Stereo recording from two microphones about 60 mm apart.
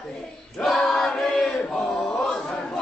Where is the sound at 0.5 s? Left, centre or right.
Centre.